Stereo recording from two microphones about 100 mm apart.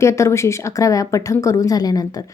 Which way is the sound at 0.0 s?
30° left (ahead or behind).